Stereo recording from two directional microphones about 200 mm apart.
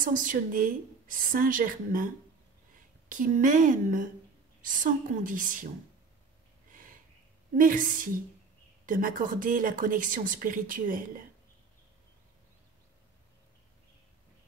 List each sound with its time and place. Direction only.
0.0 s a woman's voice: 40° right (ahead or behind)
6.7 s a sound: 45° right (ahead or behind)
7.5 s speech: 45° right (ahead or behind)